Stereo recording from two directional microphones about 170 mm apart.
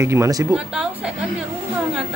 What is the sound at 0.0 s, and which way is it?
Speech, 15° right (ahead or behind).